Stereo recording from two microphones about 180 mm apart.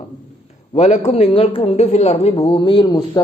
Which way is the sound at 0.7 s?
40° left (ahead or behind).